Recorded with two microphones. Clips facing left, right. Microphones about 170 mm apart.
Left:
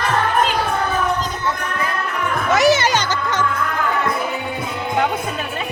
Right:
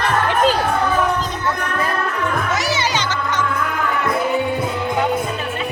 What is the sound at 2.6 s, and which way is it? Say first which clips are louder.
Music: left 6 dB; 50° left (ahead or behind).